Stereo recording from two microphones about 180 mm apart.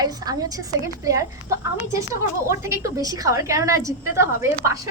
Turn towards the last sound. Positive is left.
turn(degrees=-15)  # may be behind; listen again after turning